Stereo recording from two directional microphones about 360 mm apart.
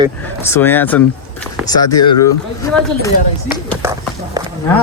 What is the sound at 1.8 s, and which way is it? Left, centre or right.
Speech, left.